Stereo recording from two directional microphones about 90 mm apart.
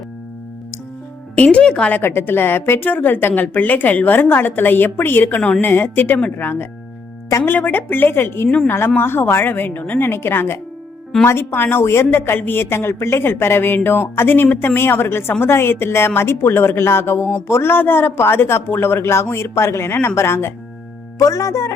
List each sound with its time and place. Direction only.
1.4 s speech: 15° left (ahead or behind)
2.0 s speech: 25° left (ahead or behind)
8.4 s speech: 15° left (ahead or behind)
9.0 s speech: 25° left (ahead or behind)